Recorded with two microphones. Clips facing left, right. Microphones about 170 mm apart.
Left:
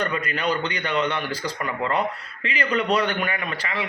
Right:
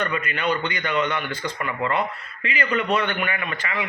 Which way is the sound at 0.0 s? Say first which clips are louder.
Even; 35° left (ahead or behind).